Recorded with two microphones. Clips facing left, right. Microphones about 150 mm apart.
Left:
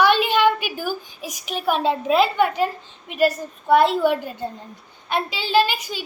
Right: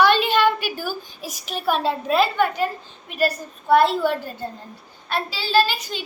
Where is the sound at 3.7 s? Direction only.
15° left (ahead or behind).